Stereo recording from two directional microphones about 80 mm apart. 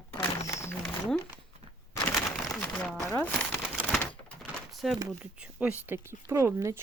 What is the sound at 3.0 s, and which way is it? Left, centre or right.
Speech, left.